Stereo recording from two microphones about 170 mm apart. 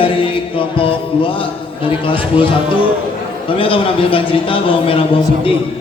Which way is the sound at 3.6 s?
30° left (ahead or behind).